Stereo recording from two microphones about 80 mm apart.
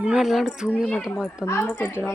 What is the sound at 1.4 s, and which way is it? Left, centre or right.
Speech, left.